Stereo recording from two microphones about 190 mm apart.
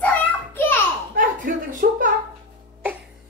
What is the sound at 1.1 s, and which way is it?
Speech, 45° right (ahead or behind).